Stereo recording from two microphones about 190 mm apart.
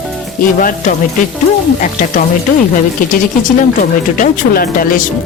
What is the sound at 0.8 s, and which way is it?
A woman's voice, 40° left (ahead or behind).